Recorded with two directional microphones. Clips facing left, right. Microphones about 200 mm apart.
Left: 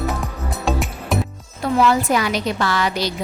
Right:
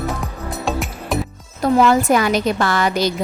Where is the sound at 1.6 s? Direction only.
50° right (ahead or behind).